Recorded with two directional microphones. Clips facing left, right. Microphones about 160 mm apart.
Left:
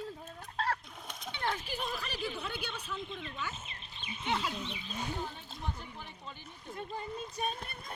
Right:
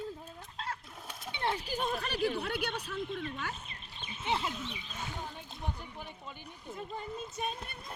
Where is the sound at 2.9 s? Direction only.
50° right (ahead or behind).